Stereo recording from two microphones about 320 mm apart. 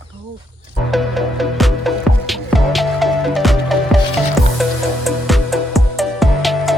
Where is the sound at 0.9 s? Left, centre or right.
Centre.